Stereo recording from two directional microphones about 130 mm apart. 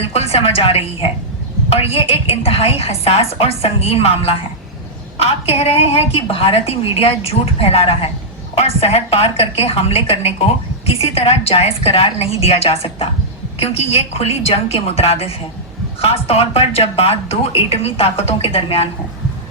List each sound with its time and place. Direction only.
0.1 s a woman's voice: 50° left (ahead or behind)